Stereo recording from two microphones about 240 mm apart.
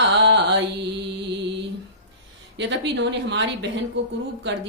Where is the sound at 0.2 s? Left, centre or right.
Right.